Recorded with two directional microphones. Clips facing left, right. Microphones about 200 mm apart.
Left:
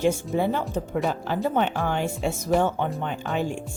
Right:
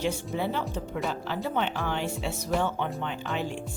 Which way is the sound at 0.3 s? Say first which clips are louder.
Left 5 dB; 50° left (ahead or behind).